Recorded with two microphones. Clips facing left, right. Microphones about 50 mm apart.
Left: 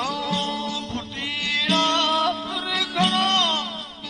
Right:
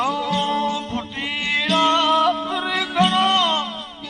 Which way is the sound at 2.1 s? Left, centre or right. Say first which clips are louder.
Right 5 dB; centre.